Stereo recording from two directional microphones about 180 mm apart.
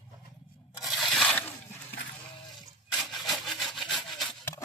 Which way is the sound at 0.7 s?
Centre (ahead or behind).